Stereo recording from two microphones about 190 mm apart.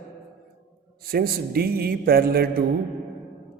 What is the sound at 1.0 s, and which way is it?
A man's voice, 55° right (ahead or behind).